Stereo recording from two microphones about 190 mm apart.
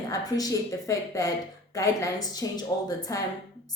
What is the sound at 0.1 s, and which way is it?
Speech, 20° left (ahead or behind).